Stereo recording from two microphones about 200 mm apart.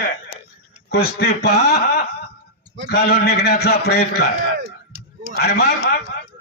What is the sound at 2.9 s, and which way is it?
A man's voice, 50° left (ahead or behind).